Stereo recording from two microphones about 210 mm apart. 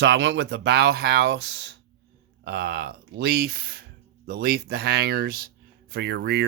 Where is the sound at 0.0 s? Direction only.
60° right (ahead or behind).